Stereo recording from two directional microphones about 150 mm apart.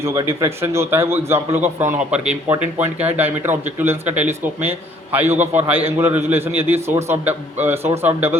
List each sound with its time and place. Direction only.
0.0 s a man's voice: 20° right (ahead or behind)
4.1 s speech: 50° right (ahead or behind)
5.1 s a man's voice: 15° right (ahead or behind)